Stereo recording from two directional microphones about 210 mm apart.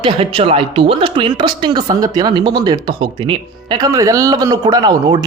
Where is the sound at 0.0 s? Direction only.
25° right (ahead or behind).